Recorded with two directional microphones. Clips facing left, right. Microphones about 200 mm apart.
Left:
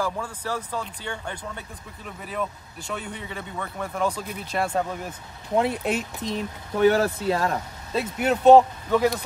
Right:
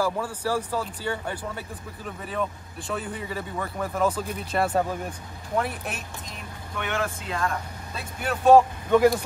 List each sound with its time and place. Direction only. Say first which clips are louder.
0.0 s speech: right 3 dB; 10° right (ahead or behind)
5.6 s speech: left 6 dB; 25° left (ahead or behind)
6.8 s speech: left 10 dB; 35° left (ahead or behind)
7.9 s speech: left 8 dB; 20° left (ahead or behind)
8.9 s speech: right 3 dB; 5° right (ahead or behind)